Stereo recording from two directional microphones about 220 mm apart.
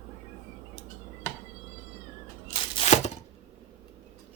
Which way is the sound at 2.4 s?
30° left (ahead or behind).